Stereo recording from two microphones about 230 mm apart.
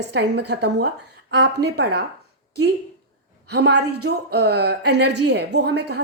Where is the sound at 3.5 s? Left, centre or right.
Right.